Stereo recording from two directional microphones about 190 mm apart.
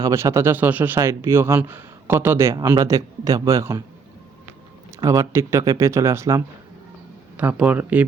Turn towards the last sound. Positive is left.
turn(degrees=-10)  # may be behind; listen again after turning